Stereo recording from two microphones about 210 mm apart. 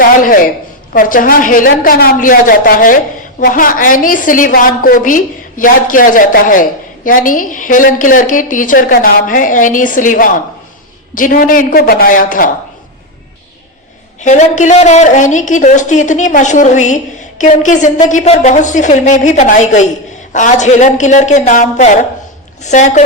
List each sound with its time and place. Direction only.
0.0 s a sound: 40° left (ahead or behind)
0.9 s a woman's voice: 40° left (ahead or behind)
14.2 s a woman's voice: 35° left (ahead or behind)